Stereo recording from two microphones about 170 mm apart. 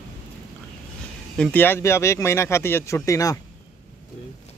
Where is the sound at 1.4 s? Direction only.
10° left (ahead or behind).